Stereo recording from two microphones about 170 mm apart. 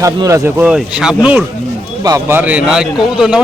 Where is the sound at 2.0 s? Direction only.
15° right (ahead or behind).